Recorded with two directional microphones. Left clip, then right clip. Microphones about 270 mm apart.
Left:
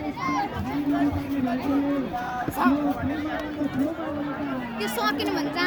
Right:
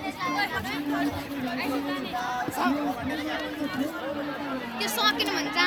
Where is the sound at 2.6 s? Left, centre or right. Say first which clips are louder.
Left 5 dB; left.